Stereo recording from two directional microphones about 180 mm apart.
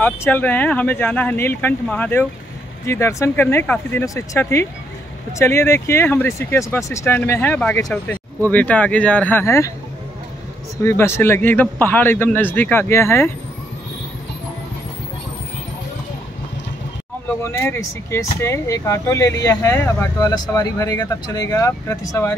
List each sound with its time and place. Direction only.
0.0 s speech: 10° left (ahead or behind)
10.8 s speech: 15° left (ahead or behind)
17.4 s speech: 15° left (ahead or behind)